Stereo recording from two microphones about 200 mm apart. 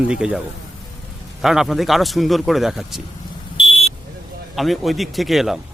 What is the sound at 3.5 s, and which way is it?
Vehicle, 25° left (ahead or behind).